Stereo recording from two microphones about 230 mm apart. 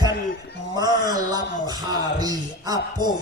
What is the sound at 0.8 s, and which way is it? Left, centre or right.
A man's voice, centre.